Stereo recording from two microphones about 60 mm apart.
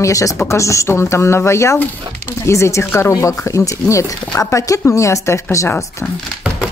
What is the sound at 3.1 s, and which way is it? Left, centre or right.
Speech, left.